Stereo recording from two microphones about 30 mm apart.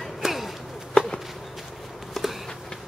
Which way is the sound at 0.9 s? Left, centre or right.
Left.